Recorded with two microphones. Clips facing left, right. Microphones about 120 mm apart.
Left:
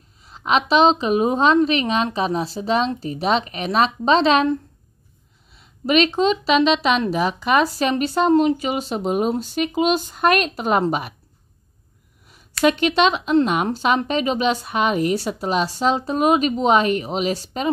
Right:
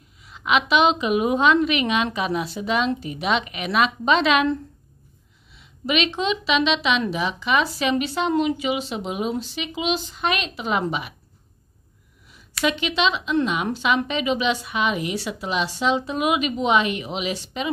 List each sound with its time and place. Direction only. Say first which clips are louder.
0.2 s a woman's voice: left 2 dB; 35° left (ahead or behind)
5.5 s a woman's voice: left 5 dB; 40° left (ahead or behind)
12.6 s a woman's voice: left 5 dB; 45° left (ahead or behind)